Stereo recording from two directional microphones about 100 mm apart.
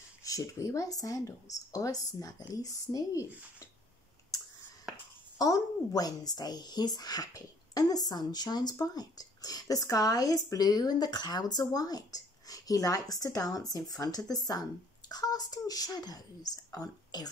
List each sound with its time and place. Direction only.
0.2 s a woman's voice: 35° left (ahead or behind)
5.4 s a woman's voice: 40° left (ahead or behind)